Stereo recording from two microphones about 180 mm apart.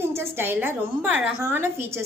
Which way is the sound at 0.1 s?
10° right (ahead or behind).